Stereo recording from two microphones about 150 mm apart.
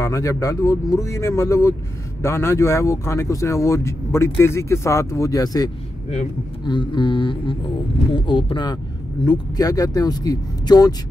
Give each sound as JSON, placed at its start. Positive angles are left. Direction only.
{"t": 0.0, "sound": "speech", "side_deg": 20}
{"t": 6.7, "sound": "a sound", "side_deg": 30}
{"t": 9.2, "sound": "speech", "side_deg": 25}